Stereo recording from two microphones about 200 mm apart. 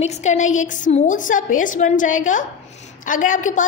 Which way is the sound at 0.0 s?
35° left (ahead or behind).